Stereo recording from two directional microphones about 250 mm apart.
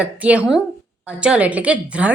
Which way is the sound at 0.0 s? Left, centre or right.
Centre.